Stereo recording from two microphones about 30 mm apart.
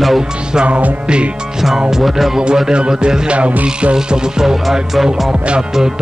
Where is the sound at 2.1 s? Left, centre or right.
Centre.